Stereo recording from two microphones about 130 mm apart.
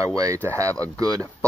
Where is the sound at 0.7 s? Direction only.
10° left (ahead or behind).